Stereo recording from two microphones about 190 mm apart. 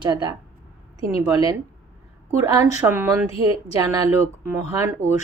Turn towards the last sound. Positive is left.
turn(degrees=-15)  # may be behind; listen again after turning